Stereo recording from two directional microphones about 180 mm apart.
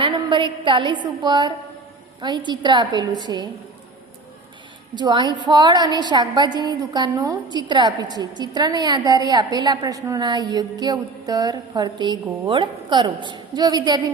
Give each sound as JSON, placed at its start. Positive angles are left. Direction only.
{"t": 0.0, "sound": "a woman's voice", "side_deg": -25}
{"t": 4.9, "sound": "a woman's voice", "side_deg": -25}